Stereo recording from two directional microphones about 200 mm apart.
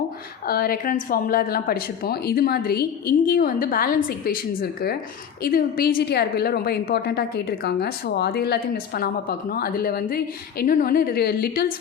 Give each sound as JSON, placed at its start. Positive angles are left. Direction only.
{"t": 0.4, "sound": "a woman's voice", "side_deg": 45}